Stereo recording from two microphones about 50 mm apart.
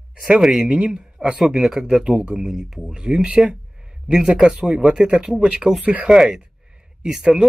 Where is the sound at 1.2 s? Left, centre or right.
Right.